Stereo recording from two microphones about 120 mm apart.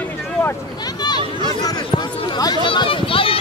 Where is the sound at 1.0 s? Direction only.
35° left (ahead or behind).